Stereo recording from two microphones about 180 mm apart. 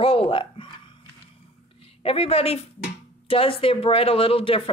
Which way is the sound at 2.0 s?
30° left (ahead or behind).